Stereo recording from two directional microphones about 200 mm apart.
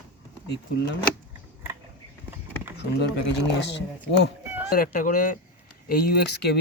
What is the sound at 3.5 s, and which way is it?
Speech, 60° left (ahead or behind).